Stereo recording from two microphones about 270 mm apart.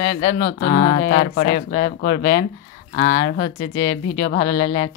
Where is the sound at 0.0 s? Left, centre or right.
Left.